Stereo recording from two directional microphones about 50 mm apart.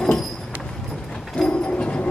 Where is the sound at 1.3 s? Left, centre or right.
Centre.